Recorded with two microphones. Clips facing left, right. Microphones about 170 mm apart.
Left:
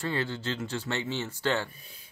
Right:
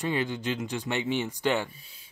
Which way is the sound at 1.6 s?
50° left (ahead or behind).